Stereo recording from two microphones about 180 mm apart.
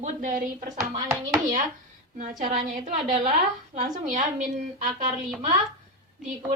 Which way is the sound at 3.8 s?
45° right (ahead or behind).